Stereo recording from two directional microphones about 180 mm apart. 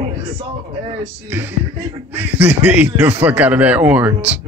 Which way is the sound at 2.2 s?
10° right (ahead or behind).